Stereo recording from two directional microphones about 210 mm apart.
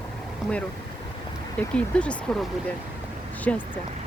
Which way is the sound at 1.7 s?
5° left (ahead or behind).